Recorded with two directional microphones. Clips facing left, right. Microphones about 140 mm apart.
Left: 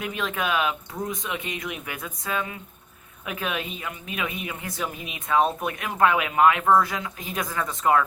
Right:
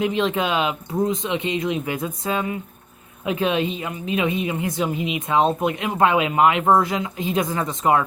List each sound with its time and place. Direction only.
0.0 s a woman's voice: 25° right (ahead or behind)